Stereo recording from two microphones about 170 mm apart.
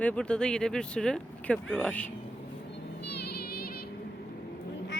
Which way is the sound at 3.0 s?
75° left (ahead or behind).